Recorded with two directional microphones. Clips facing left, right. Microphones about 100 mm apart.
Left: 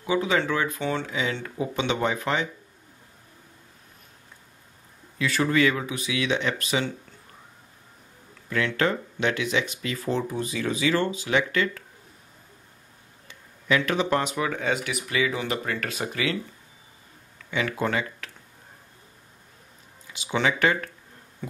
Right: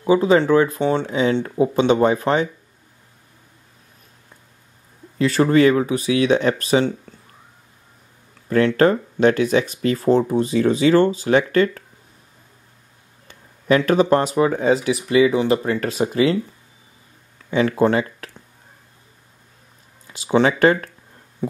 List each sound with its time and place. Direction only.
0.0 s speech: 35° right (ahead or behind)
5.2 s speech: 35° right (ahead or behind)
8.5 s speech: 40° right (ahead or behind)
13.3 s speech: 40° right (ahead or behind)
17.5 s speech: 35° right (ahead or behind)
20.1 s speech: 40° right (ahead or behind)
21.4 s a sound: 30° right (ahead or behind)